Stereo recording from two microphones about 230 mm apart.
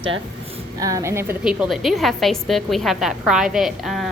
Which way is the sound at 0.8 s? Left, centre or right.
Centre.